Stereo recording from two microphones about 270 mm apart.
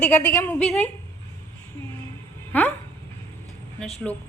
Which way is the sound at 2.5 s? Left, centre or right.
Centre.